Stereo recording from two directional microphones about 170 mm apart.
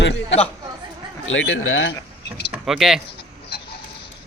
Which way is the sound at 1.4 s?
90° left.